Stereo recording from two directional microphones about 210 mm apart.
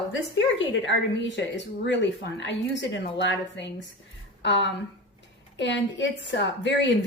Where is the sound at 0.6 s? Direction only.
60° left (ahead or behind).